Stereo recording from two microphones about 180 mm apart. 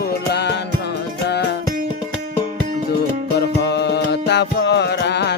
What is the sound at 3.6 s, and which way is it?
Music, 70° left (ahead or behind).